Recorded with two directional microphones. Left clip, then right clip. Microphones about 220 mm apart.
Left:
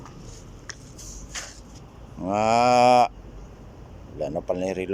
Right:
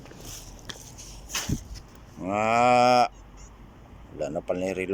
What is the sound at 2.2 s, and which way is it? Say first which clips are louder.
Mantra: left 3 dB; 5° left (ahead or behind).